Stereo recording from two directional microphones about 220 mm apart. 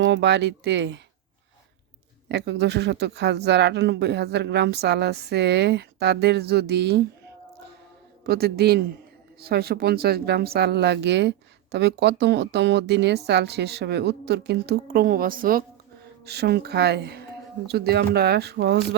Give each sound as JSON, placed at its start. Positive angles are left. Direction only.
{"t": 0.0, "sound": "speech", "side_deg": -55}
{"t": 2.3, "sound": "speech", "side_deg": -50}
{"t": 8.3, "sound": "speech", "side_deg": -45}